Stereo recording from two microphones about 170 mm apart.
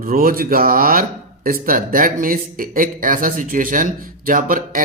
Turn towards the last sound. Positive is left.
turn(degrees=-55)  # may be behind; listen again after turning